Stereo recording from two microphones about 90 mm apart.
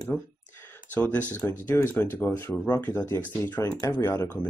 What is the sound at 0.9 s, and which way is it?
Speech, 20° left (ahead or behind).